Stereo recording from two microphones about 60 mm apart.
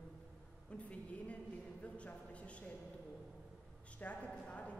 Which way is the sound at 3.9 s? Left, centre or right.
Left.